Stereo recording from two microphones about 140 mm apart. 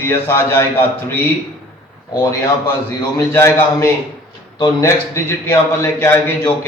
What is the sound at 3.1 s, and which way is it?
A man's voice, 20° left (ahead or behind).